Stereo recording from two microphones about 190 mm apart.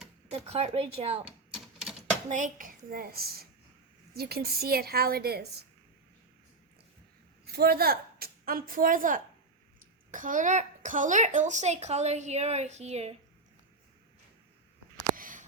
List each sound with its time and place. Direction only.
0.3 s a child's voice: 35° right (ahead or behind)
1.8 s typewriter: 5° right (ahead or behind)
2.3 s a woman's voice: 45° right (ahead or behind)
7.4 s a woman's voice: 55° right (ahead or behind); by 13.1 s 35° right (ahead or behind)
15.1 s a sound: 45° right (ahead or behind)